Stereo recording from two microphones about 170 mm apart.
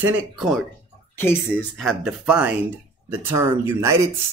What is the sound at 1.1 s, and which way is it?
Speech, 15° left (ahead or behind).